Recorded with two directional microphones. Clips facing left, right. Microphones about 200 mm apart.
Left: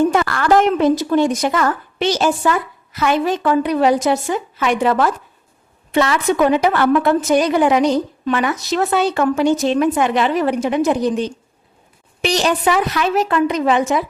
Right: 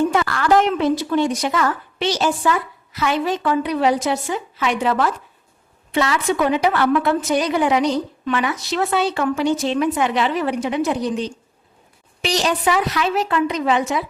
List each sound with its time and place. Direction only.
0.1 s a woman's voice: 50° left (ahead or behind)